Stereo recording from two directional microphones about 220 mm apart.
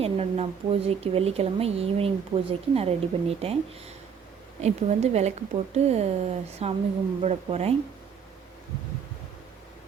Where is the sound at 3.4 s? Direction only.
25° right (ahead or behind).